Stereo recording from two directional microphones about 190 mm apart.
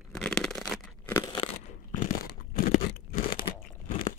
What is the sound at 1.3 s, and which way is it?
Crunch, 25° left (ahead or behind).